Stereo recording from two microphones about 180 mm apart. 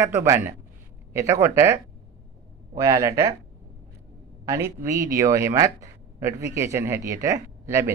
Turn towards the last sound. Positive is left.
turn(degrees=-15)  # may be behind; listen again after turning